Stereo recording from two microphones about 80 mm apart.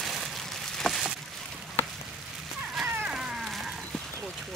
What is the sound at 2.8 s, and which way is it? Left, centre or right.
Cat, centre.